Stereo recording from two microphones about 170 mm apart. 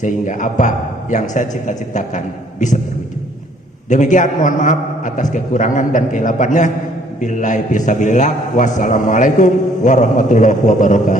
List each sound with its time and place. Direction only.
0.0 s a man's voice: 45° left (ahead or behind)
3.8 s a man's voice: 45° left (ahead or behind)